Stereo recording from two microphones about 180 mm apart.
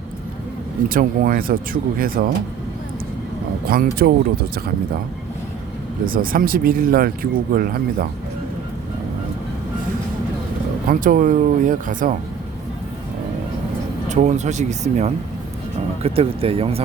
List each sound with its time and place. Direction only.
0.9 s speech: 50° right (ahead or behind)
3.7 s speech: 55° right (ahead or behind)
6.1 s speech: 50° right (ahead or behind)
10.8 s speech: 50° right (ahead or behind)
14.1 s speech: 40° right (ahead or behind)